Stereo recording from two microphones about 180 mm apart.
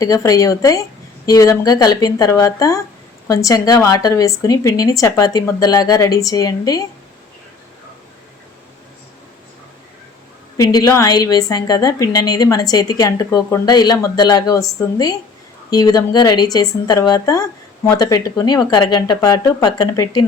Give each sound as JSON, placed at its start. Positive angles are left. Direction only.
{"t": 0.0, "sound": "a woman's voice", "side_deg": 20}
{"t": 10.6, "sound": "a woman's voice", "side_deg": 20}